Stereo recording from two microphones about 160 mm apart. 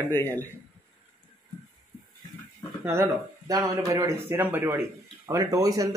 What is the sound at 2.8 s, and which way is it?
Speech, 15° right (ahead or behind).